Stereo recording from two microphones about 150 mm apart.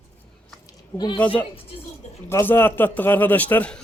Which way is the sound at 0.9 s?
30° left (ahead or behind).